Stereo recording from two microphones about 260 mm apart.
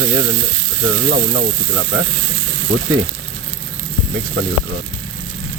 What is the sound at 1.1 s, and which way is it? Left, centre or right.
Stir, right.